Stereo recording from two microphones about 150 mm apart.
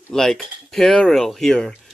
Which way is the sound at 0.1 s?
5° left (ahead or behind).